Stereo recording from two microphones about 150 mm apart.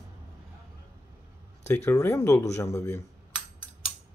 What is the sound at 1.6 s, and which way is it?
Speech, 20° left (ahead or behind).